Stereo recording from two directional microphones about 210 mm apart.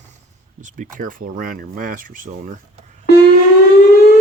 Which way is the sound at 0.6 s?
40° right (ahead or behind).